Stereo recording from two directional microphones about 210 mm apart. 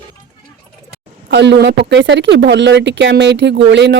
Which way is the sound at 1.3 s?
55° right (ahead or behind).